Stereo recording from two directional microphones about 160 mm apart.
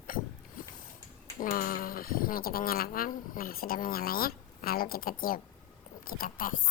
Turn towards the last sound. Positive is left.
turn(degrees=60)  # may be behind; listen again after turning